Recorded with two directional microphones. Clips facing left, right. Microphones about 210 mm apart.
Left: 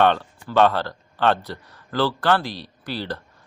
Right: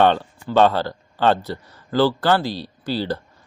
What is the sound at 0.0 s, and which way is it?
A man's voice, 30° right (ahead or behind).